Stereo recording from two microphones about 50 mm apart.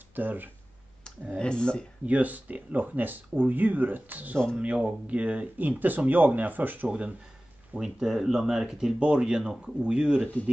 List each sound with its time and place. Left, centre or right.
0.1 s speech: right
1.4 s speech: centre
2.0 s speech: right
4.6 s speech: right
6.9 s speech: right
7.8 s speech: centre